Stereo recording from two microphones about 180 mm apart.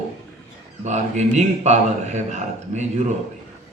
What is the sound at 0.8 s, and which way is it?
A man's voice, 40° right (ahead or behind).